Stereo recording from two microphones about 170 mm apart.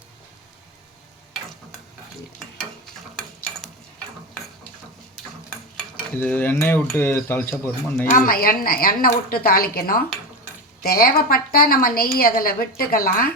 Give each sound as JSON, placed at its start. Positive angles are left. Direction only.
{"t": 5.2, "sound": "cutlery", "side_deg": 0}
{"t": 8.1, "sound": "a woman's voice", "side_deg": 55}